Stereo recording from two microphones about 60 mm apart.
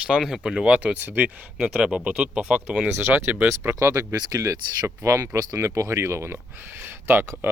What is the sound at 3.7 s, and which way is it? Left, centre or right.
Speech, right.